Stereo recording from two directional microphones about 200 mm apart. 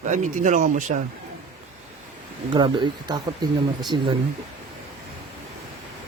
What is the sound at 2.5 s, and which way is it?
Speech, 25° right (ahead or behind).